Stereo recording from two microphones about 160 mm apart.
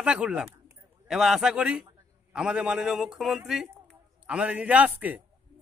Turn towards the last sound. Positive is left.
turn(degrees=-10)  # may be behind; listen again after turning